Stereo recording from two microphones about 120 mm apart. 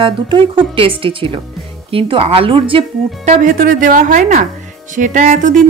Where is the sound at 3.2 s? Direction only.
90° right.